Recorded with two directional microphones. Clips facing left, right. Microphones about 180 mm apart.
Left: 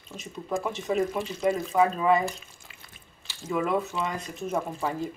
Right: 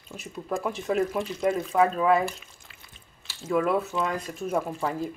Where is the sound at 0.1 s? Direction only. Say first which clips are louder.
Even; 5° right (ahead or behind).